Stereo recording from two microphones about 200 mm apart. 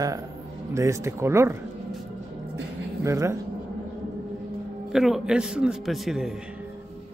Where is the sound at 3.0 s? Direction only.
15° right (ahead or behind).